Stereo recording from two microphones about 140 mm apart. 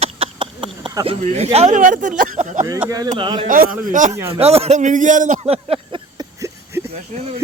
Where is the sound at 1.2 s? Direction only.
55° right (ahead or behind).